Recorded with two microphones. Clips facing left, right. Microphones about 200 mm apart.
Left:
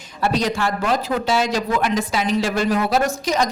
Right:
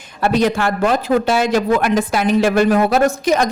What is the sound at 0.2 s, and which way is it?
Speech, 55° right (ahead or behind).